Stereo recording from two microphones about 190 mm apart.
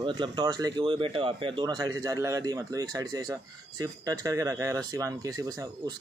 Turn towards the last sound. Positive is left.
turn(degrees=-15)  # may be behind; listen again after turning